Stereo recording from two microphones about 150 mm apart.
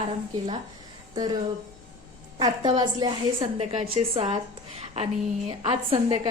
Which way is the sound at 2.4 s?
30° right (ahead or behind).